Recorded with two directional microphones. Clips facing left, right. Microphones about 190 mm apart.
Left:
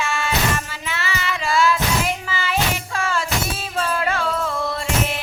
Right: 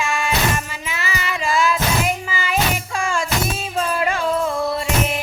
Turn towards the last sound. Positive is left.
turn(degrees=-15)  # may be behind; listen again after turning